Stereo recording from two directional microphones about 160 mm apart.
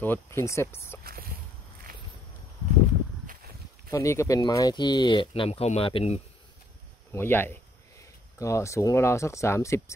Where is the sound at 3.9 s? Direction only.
20° left (ahead or behind); by 6.2 s 35° left (ahead or behind).